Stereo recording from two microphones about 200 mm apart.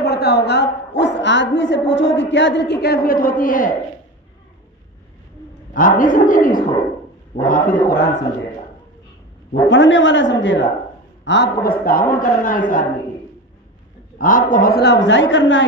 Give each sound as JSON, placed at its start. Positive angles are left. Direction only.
{"t": 0.0, "sound": "a man's voice", "side_deg": 50}
{"t": 5.7, "sound": "a man's voice", "side_deg": 45}
{"t": 9.7, "sound": "a man's voice", "side_deg": 65}
{"t": 11.8, "sound": "a man's voice", "side_deg": 45}
{"t": 14.1, "sound": "a man's voice", "side_deg": 40}